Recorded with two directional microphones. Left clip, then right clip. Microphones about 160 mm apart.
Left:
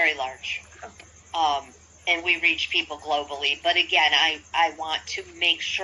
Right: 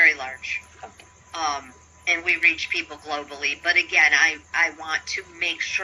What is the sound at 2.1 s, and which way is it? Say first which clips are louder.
A woman's voice: right 2 dB; 40° right (ahead or behind).